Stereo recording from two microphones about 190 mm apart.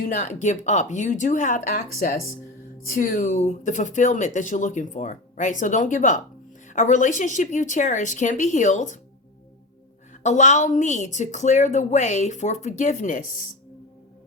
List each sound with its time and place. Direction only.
0.0 s a woman's voice: 40° left (ahead or behind)
10.2 s a woman's voice: 40° left (ahead or behind)